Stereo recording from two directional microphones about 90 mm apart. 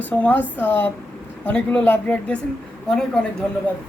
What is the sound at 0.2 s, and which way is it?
Speech, 20° left (ahead or behind).